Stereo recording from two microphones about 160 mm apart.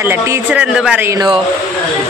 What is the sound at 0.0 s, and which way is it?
Speech, 15° right (ahead or behind).